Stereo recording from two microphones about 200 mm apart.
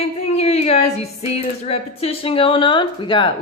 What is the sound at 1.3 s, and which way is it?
Speech, 30° left (ahead or behind).